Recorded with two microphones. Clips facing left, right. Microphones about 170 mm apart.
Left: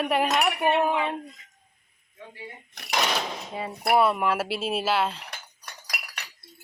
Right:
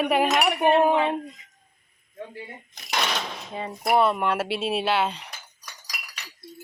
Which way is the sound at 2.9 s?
5° left (ahead or behind).